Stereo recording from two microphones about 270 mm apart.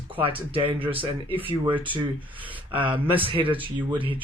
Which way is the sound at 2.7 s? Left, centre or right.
Centre.